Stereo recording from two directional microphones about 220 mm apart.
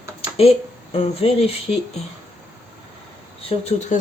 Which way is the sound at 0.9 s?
25° left (ahead or behind).